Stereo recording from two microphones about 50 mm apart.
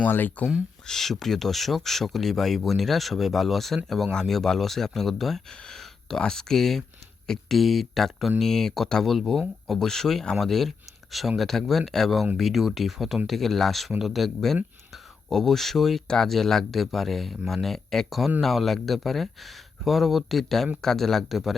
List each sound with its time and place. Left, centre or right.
0.0 s speech: left
0.9 s speech: centre